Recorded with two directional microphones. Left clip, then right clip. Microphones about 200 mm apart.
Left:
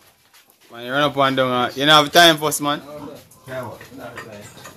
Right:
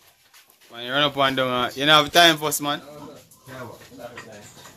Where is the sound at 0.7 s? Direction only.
Centre (ahead or behind).